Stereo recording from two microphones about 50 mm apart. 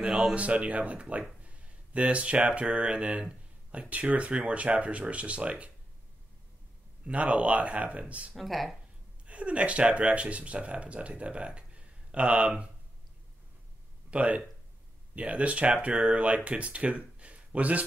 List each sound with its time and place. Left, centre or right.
0.3 s speech: right
7.1 s speech: right
8.4 s speech: centre
9.2 s speech: right
14.1 s speech: right